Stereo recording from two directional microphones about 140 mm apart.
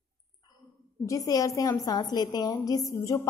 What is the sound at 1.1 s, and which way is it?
A woman's voice, 25° left (ahead or behind).